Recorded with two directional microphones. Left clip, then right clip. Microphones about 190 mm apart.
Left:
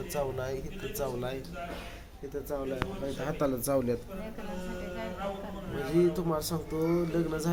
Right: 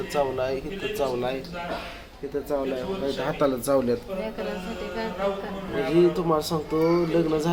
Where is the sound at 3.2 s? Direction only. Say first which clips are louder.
Right 6 dB; 15° left (ahead or behind).